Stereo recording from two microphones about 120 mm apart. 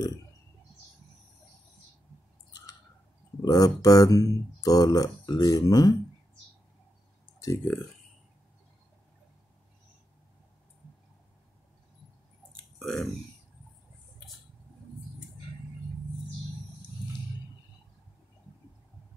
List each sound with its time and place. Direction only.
3.4 s speech: 30° left (ahead or behind)
7.3 s speech: 20° left (ahead or behind)
12.7 s speech: centre (ahead or behind)